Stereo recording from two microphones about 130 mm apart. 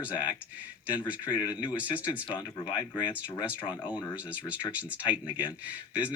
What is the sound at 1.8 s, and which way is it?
Speech, 10° right (ahead or behind).